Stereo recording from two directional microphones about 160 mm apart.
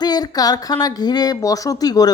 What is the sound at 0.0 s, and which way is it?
A woman's voice, 25° left (ahead or behind).